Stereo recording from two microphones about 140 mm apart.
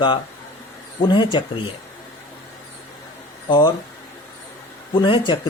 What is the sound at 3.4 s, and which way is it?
Speech, 30° left (ahead or behind).